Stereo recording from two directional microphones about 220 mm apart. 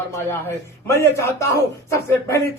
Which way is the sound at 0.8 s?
15° left (ahead or behind).